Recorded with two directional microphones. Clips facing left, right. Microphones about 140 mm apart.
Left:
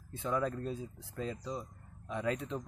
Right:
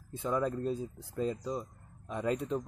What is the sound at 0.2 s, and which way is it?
Speech, 10° right (ahead or behind).